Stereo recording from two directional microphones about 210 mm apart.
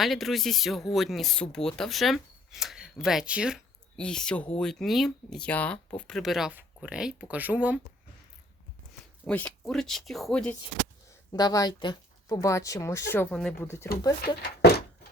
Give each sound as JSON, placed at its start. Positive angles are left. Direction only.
{"t": 0.0, "sound": "speech", "side_deg": 0}
{"t": 9.2, "sound": "speech", "side_deg": 5}
{"t": 11.3, "sound": "speech", "side_deg": 20}
{"t": 14.2, "sound": "speech", "side_deg": 45}